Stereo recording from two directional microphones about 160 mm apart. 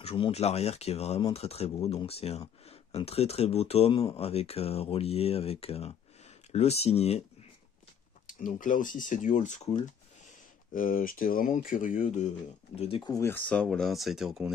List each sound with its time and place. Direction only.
0.0 s speech: 40° left (ahead or behind)
8.3 s speech: 55° left (ahead or behind)
12.7 s speech: 35° left (ahead or behind)
13.1 s speech: 15° left (ahead or behind); by 14.5 s centre (ahead or behind)